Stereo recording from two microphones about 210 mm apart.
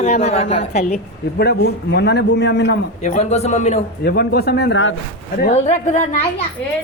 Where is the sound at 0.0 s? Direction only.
30° left (ahead or behind).